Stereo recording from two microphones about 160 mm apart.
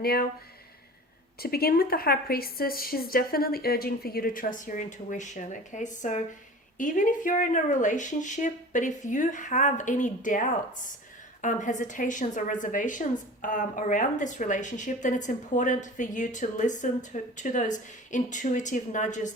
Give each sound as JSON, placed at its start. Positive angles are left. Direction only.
{"t": 0.0, "sound": "a woman's voice", "side_deg": 75}
{"t": 1.4, "sound": "a woman's voice", "side_deg": 75}